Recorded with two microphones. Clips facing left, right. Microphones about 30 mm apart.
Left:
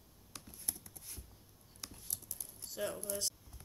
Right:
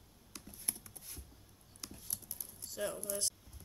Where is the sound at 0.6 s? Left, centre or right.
Right.